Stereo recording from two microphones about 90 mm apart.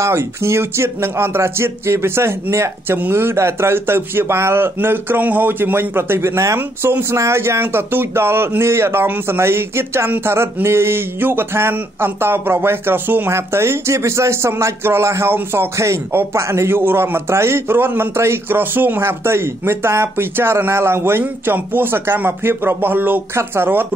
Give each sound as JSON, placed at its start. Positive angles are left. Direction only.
{"t": 0.0, "sound": "speech", "side_deg": -30}